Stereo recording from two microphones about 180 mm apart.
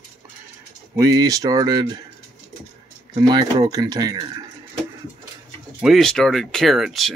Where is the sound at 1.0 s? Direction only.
20° right (ahead or behind).